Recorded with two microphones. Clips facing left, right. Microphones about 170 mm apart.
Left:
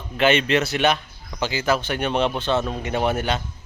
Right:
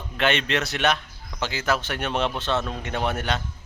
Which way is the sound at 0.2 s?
Centre (ahead or behind).